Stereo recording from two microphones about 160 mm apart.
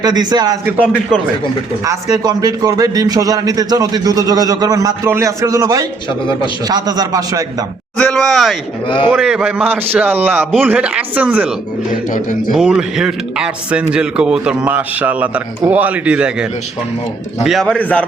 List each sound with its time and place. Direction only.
0.0 s a man's voice: 25° right (ahead or behind)
1.8 s a man's voice: 20° right (ahead or behind)
7.9 s a man's voice: 5° left (ahead or behind)
11.9 s a man's voice: 55° left (ahead or behind)
12.5 s a man's voice: 5° right (ahead or behind)